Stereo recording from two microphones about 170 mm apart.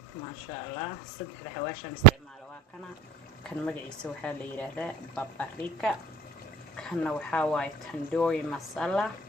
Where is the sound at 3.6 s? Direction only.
5° left (ahead or behind).